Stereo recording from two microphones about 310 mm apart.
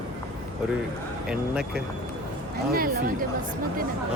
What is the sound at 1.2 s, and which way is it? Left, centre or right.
Speech, centre.